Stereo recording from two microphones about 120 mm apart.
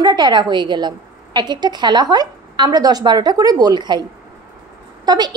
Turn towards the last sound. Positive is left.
turn(degrees=-35)  # may be behind; listen again after turning